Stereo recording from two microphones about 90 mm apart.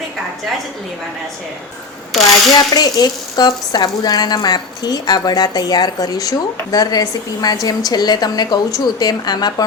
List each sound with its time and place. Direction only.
2.6 s speech: 45° left (ahead or behind)